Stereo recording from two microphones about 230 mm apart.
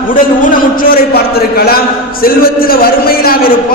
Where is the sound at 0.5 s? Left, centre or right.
Left.